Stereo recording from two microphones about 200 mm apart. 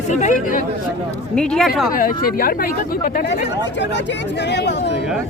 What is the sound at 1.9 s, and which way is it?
Speech, 45° left (ahead or behind).